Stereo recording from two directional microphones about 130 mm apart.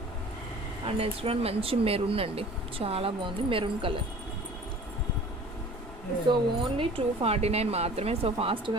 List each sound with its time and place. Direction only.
0.9 s speech: 45° right (ahead or behind)
6.2 s speech: 40° right (ahead or behind)